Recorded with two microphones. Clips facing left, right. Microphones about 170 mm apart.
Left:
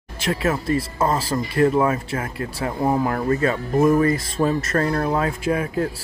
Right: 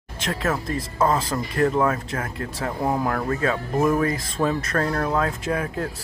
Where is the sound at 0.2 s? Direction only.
10° left (ahead or behind).